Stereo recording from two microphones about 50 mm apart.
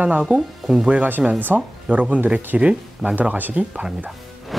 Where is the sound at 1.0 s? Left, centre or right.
Right.